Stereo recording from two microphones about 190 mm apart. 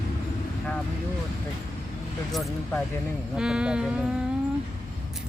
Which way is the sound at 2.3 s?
Centre (ahead or behind).